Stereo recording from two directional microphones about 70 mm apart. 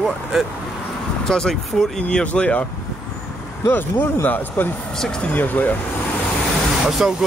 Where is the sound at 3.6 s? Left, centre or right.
Left.